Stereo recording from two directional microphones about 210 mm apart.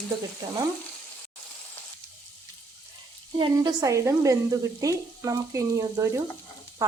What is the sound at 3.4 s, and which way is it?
Frying, 15° right (ahead or behind).